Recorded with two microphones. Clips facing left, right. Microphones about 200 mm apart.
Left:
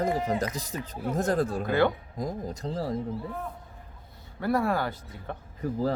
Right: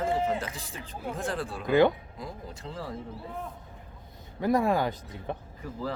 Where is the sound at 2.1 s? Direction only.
40° left (ahead or behind).